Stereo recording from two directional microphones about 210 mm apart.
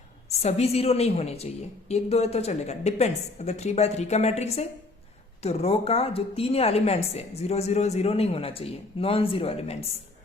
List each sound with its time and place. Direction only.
0.3 s a woman's voice: 30° left (ahead or behind)